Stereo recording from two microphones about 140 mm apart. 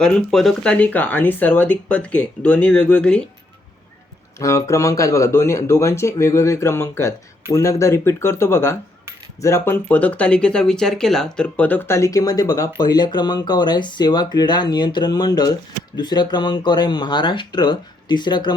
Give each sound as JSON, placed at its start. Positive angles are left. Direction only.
{"t": 0.0, "sound": "speech", "side_deg": 5}
{"t": 4.4, "sound": "speech", "side_deg": 20}